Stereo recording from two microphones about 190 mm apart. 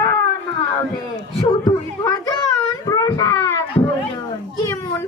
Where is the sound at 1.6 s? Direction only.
20° left (ahead or behind).